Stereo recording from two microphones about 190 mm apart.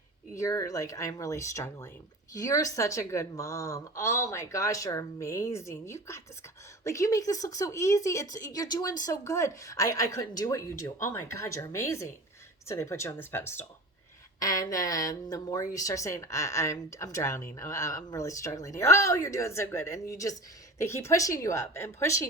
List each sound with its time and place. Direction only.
0.3 s a woman's voice: 15° left (ahead or behind)